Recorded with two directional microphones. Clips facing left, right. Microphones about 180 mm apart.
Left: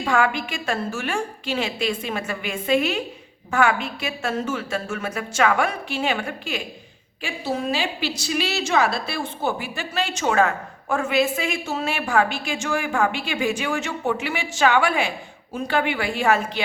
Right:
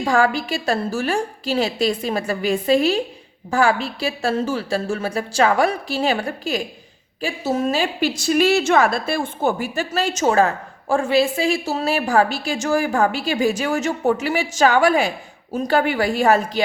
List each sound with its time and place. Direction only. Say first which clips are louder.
0.0 s a woman's voice: right 3 dB; 35° right (ahead or behind)